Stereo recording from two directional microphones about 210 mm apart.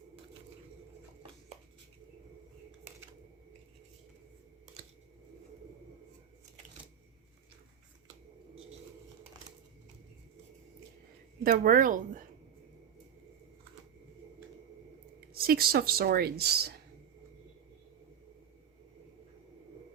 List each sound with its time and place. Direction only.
11.4 s speech: 40° right (ahead or behind)
15.3 s speech: 45° right (ahead or behind)